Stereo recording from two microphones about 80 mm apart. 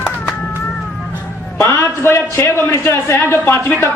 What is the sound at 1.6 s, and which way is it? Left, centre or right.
A man's voice, left.